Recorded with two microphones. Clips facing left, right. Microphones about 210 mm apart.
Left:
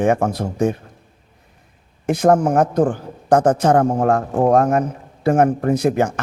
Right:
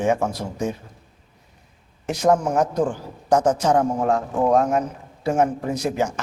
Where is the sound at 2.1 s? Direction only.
55° left (ahead or behind).